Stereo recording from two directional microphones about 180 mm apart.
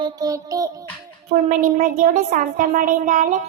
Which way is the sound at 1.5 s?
45° right (ahead or behind).